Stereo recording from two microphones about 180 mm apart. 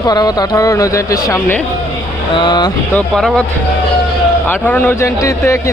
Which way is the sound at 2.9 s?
5° left (ahead or behind).